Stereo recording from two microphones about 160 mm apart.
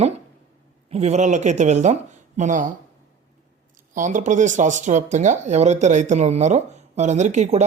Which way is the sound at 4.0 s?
50° right (ahead or behind).